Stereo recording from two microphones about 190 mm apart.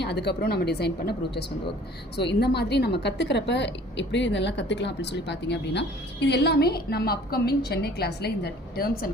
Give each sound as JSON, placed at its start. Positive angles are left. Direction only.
{"t": 0.0, "sound": "a woman's voice", "side_deg": 60}